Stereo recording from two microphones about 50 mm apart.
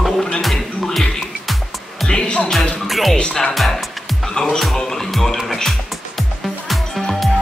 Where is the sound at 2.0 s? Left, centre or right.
Centre.